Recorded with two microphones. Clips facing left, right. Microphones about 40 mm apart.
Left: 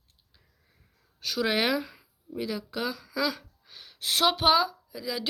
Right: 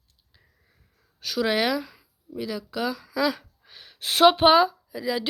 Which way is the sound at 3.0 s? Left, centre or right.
Centre.